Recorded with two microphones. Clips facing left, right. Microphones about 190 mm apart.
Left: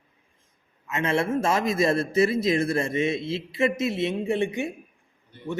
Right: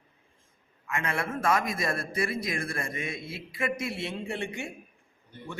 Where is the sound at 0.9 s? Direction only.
25° left (ahead or behind).